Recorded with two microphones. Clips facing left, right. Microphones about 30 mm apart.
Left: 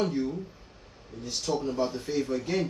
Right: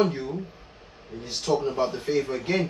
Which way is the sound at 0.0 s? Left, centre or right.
Right.